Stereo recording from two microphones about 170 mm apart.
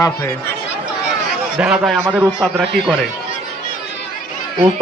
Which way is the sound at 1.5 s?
5° right (ahead or behind).